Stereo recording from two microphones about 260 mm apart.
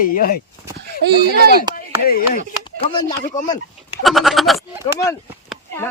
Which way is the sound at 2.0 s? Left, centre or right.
Left.